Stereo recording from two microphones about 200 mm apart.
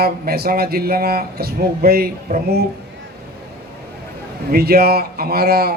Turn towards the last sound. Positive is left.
turn(degrees=-50)  # may be behind; listen again after turning